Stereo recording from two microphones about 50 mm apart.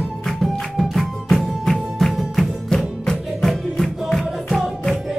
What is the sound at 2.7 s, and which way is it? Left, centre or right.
Music, centre.